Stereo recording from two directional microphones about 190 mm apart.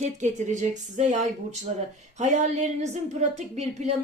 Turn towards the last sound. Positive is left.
turn(degrees=-35)  # may be behind; listen again after turning